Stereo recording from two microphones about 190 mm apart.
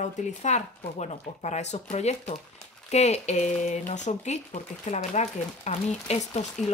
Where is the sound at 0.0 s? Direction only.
35° left (ahead or behind).